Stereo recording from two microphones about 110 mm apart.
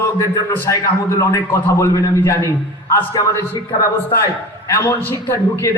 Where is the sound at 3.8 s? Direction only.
30° left (ahead or behind).